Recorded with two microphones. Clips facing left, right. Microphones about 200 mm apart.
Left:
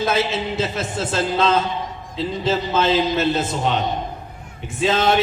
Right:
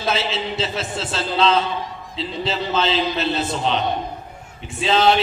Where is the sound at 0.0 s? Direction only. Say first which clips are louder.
Left 3 dB; 50° left (ahead or behind).